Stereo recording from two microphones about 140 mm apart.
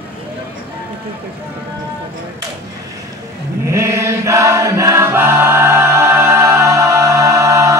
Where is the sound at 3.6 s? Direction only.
20° right (ahead or behind).